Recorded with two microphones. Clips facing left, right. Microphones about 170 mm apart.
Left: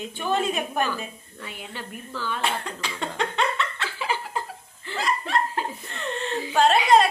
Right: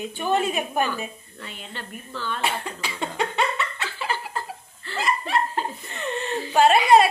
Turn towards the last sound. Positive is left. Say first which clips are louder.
# right 2 dB
turn(degrees=-5)  # may be behind; listen again after turning